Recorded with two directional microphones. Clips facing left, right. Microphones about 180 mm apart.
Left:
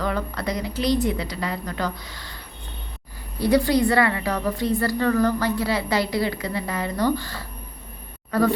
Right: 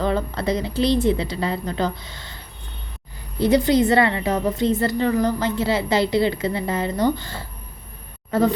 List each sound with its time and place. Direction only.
0.0 s a woman's voice: 25° right (ahead or behind)